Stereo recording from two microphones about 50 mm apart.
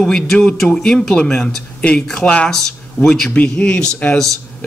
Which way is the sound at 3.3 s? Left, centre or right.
Left.